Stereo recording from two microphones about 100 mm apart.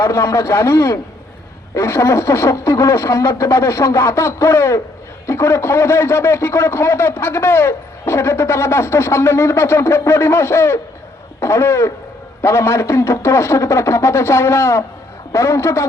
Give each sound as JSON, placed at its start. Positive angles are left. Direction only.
{"t": 0.0, "sound": "a man's voice", "side_deg": 30}